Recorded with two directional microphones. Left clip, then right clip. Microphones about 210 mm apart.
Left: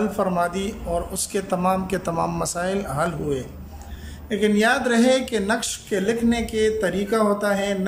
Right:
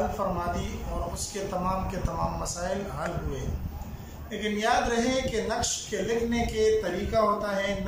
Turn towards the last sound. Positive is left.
turn(degrees=55)  # may be behind; listen again after turning